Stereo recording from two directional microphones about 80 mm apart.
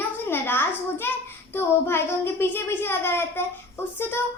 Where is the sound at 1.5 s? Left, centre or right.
Left.